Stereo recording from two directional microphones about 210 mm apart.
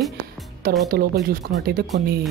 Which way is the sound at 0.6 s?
45° right (ahead or behind).